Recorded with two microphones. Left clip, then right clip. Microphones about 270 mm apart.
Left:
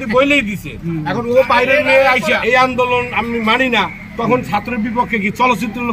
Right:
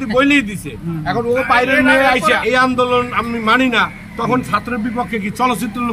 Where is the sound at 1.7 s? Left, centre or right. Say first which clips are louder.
Left 1 dB; centre.